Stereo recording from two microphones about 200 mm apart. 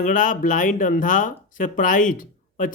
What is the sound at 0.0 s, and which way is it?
A man's voice, 40° left (ahead or behind).